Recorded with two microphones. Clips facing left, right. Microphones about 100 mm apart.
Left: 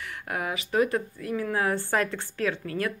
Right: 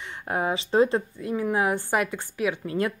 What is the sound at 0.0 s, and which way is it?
Speech, 25° right (ahead or behind).